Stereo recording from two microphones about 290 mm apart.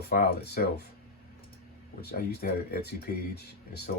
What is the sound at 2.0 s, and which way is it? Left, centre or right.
Speech, left.